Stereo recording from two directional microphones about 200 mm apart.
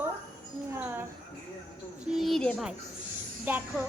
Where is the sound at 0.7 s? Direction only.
10° right (ahead or behind).